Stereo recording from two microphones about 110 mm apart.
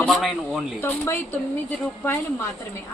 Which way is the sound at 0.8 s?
20° left (ahead or behind).